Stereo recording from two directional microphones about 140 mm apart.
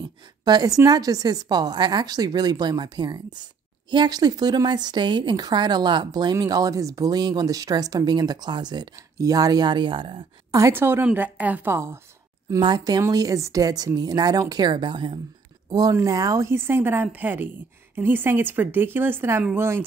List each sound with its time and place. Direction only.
0.5 s speech: 25° right (ahead or behind)
10.5 s a woman's voice: 20° right (ahead or behind)
12.4 s a woman's voice: 30° right (ahead or behind)